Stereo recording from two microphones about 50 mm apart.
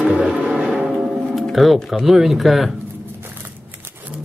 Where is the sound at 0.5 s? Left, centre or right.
Centre.